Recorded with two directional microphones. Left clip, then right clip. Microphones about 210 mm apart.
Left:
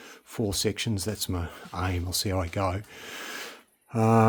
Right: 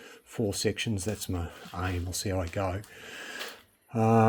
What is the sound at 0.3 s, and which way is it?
Speech, 25° left (ahead or behind).